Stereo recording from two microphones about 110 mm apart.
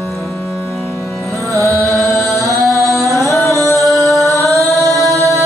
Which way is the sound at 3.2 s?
25° left (ahead or behind).